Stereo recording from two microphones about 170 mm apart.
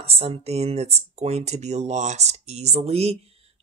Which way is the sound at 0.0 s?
35° right (ahead or behind).